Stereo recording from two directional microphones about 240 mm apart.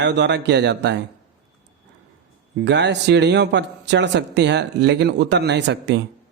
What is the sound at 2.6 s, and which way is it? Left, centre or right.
Speech, right.